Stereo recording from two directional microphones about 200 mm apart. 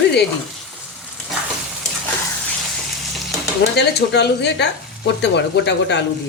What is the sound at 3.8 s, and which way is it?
Speech, 55° left (ahead or behind).